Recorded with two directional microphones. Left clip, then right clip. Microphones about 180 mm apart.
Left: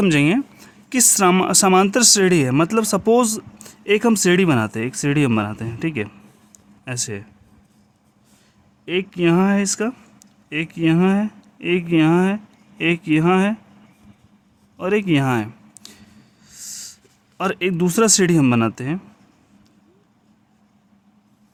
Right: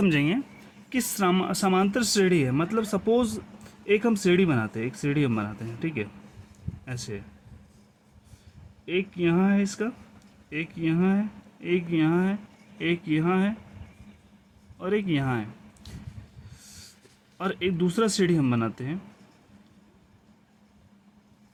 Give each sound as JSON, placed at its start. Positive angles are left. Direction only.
{"t": 0.0, "sound": "speech", "side_deg": 50}
{"t": 8.9, "sound": "speech", "side_deg": 50}
{"t": 14.8, "sound": "speech", "side_deg": 55}
{"t": 17.3, "sound": "speech", "side_deg": 55}